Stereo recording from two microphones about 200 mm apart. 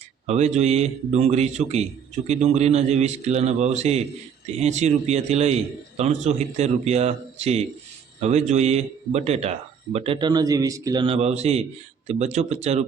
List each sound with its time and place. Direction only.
0.3 s a man's voice: 35° right (ahead or behind)